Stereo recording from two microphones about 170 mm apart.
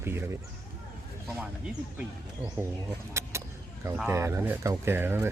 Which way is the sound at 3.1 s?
15° right (ahead or behind).